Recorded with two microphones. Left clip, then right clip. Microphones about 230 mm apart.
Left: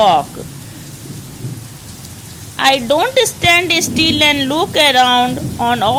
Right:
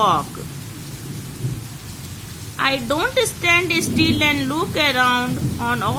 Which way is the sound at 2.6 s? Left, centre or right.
Centre.